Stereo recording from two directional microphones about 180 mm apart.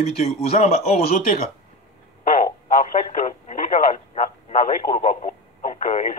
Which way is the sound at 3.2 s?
45° left (ahead or behind).